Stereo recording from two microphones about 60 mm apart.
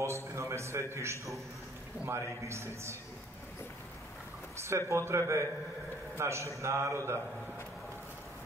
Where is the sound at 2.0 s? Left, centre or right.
Right.